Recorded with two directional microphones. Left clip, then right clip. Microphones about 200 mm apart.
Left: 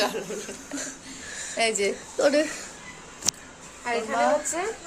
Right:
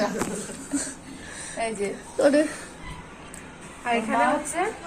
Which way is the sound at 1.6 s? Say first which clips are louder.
Left 4 dB; 55° left (ahead or behind).